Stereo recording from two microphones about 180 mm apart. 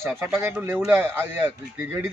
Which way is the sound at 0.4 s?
10° right (ahead or behind).